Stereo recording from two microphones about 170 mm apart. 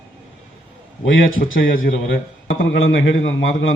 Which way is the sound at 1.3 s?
60° left (ahead or behind).